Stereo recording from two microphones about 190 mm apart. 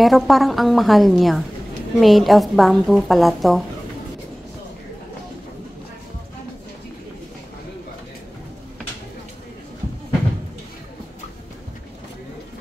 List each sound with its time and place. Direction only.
0.0 s a woman's voice: centre (ahead or behind)